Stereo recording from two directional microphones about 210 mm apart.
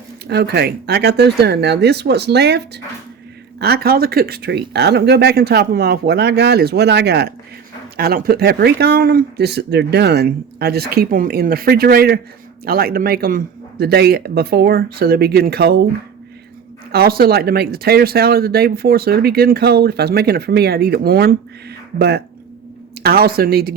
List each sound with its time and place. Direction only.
0.3 s speech: 50° right (ahead or behind)
16.9 s speech: 45° right (ahead or behind)